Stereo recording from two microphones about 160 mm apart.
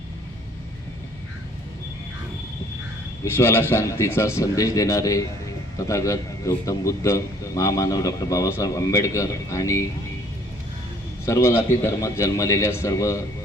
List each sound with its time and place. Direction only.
3.3 s a man's voice: 15° left (ahead or behind)
11.3 s a man's voice: 20° left (ahead or behind)